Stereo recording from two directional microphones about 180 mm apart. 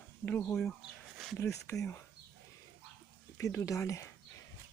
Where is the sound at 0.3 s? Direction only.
10° left (ahead or behind).